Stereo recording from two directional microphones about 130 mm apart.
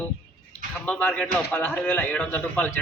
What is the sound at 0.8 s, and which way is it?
A man's voice, 10° left (ahead or behind).